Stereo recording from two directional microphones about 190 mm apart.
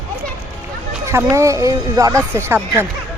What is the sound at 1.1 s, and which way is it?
Speech, 15° right (ahead or behind).